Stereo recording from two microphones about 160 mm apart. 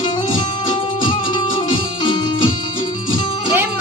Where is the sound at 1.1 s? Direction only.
30° left (ahead or behind).